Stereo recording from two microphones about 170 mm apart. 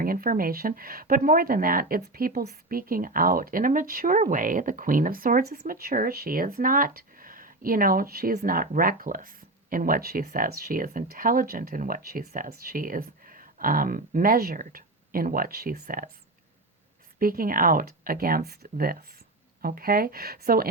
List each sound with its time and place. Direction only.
0.0 s speech: 60° right (ahead or behind)
17.2 s speech: 55° right (ahead or behind)